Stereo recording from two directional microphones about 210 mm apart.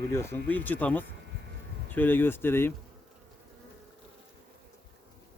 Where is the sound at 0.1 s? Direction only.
10° left (ahead or behind).